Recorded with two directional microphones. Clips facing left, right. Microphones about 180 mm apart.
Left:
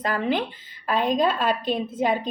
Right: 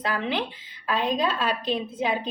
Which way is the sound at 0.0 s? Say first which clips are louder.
Left 3 dB; 45° left (ahead or behind).